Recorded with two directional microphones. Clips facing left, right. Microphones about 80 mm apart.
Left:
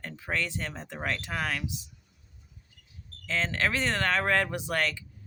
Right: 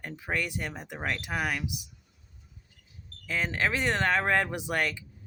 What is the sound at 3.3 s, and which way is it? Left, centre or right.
Speech, centre.